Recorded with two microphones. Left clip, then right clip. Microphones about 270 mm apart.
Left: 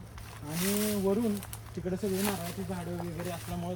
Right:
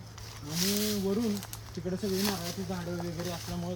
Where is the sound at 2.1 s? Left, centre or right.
Centre.